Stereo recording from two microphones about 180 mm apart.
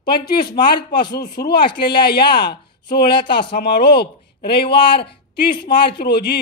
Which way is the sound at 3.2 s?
25° left (ahead or behind).